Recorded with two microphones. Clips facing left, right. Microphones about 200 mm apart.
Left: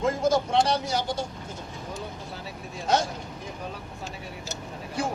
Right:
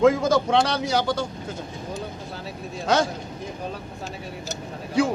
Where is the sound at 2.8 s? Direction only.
90° right.